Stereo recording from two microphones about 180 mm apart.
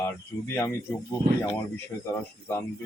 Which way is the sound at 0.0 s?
10° left (ahead or behind).